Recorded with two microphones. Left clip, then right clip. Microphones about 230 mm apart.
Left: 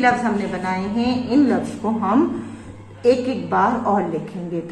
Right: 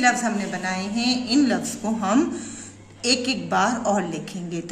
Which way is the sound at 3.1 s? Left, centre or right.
Right.